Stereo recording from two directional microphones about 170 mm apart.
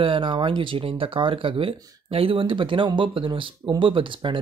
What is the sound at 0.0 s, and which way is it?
Speech, 30° right (ahead or behind).